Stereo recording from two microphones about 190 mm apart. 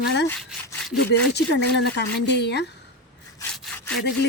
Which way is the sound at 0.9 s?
60° left (ahead or behind).